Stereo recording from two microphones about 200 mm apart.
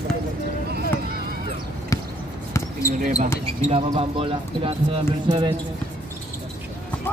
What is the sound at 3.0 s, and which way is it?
Speech, 40° right (ahead or behind).